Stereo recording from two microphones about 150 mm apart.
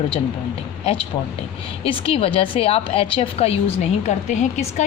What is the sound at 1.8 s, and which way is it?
A woman's voice, 40° left (ahead or behind).